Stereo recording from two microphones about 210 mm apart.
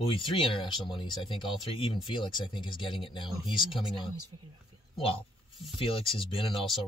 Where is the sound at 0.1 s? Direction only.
25° left (ahead or behind).